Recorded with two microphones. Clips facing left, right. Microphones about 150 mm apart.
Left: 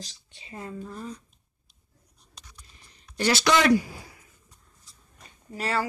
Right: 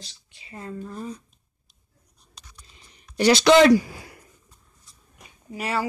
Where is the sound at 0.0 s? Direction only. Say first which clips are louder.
Left 4 dB; 30° left (ahead or behind).